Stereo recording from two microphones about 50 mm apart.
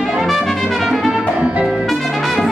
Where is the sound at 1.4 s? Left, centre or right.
Right.